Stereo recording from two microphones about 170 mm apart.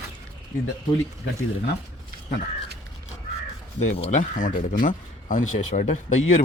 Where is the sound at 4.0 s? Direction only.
45° left (ahead or behind).